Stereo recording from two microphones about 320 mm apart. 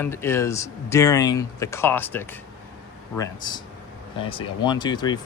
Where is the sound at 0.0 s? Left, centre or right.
Centre.